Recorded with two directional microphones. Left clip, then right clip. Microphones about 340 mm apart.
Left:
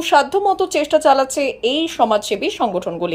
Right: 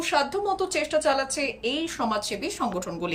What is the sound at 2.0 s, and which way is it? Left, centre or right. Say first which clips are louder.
Speech: left 13 dB; left.